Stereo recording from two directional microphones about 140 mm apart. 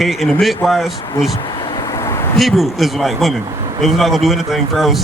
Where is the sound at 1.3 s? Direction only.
30° left (ahead or behind).